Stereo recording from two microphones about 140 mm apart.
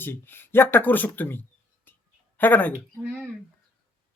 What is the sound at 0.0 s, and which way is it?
Speech, 15° left (ahead or behind).